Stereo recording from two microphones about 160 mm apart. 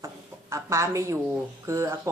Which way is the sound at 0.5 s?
20° right (ahead or behind).